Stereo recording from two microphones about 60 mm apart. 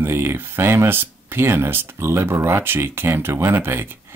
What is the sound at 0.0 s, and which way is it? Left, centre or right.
Speech, right.